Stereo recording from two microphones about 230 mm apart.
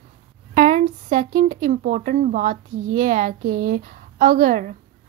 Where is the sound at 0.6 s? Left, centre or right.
Right.